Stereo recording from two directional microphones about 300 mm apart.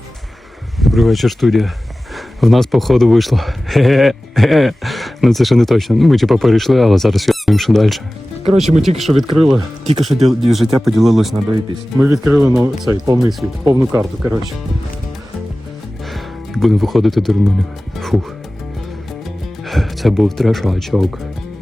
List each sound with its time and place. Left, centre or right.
0.8 s speech: centre
9.6 s speech: right
10.2 s speech: centre
16.0 s music: centre
19.6 s speech: centre